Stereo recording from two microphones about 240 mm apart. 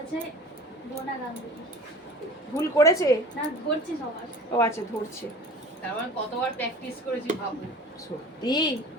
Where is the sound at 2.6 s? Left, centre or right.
Centre.